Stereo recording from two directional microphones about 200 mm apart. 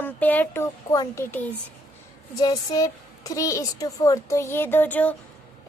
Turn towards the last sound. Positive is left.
turn(degrees=10)  # may be behind; listen again after turning